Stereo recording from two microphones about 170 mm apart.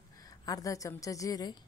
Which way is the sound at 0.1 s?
20° left (ahead or behind).